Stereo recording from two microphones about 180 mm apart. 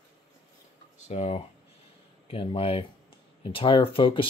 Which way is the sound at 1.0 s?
35° left (ahead or behind).